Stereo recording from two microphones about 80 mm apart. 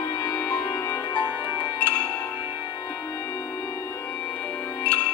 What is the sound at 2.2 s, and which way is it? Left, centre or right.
Music, left.